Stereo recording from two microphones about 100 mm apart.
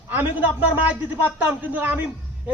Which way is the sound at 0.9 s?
20° right (ahead or behind).